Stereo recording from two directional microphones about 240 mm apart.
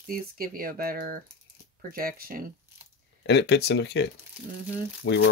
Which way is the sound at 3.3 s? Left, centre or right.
Left.